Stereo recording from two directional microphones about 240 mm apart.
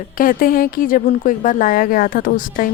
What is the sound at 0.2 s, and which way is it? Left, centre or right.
Speech, left.